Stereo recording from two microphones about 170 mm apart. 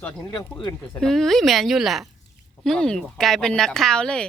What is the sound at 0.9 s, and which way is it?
Speech, 5° left (ahead or behind).